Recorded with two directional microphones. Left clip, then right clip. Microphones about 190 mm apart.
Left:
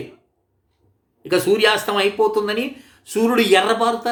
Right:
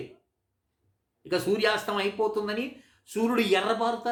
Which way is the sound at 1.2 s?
10° left (ahead or behind).